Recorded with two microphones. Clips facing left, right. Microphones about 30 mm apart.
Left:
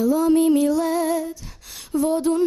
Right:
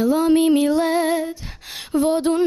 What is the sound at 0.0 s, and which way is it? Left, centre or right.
Music, right.